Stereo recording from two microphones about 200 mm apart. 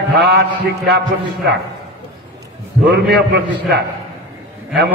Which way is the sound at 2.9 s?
55° right (ahead or behind).